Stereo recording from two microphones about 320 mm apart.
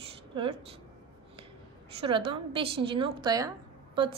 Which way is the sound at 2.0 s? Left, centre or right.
Centre.